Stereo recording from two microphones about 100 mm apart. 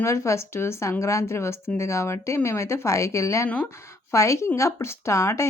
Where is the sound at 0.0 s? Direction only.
30° left (ahead or behind).